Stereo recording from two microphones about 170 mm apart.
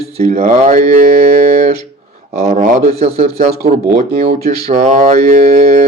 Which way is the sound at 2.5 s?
50° right (ahead or behind).